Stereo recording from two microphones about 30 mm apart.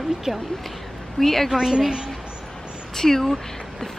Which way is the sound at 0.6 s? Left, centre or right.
Centre.